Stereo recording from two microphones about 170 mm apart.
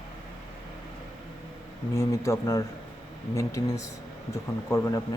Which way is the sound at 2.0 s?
15° left (ahead or behind).